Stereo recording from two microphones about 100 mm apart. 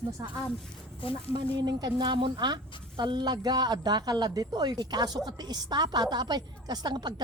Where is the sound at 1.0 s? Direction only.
65° left (ahead or behind).